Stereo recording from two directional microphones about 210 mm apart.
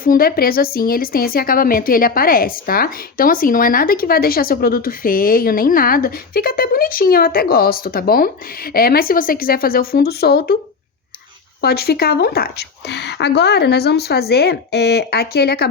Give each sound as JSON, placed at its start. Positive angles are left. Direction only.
{"t": 0.0, "sound": "a woman's voice", "side_deg": 45}
{"t": 11.6, "sound": "a woman's voice", "side_deg": 50}